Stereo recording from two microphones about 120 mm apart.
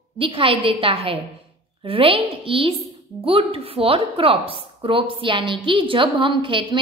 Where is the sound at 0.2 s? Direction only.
50° right (ahead or behind).